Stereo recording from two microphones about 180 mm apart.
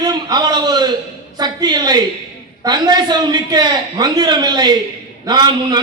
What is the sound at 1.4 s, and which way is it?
A woman's voice, 25° right (ahead or behind).